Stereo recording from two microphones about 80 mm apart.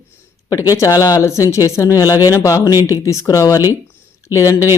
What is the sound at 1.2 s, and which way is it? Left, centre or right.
Speech, left.